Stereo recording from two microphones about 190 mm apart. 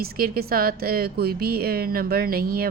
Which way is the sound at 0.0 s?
50° right (ahead or behind).